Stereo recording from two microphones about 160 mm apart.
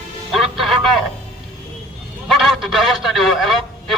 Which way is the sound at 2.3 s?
Centre (ahead or behind).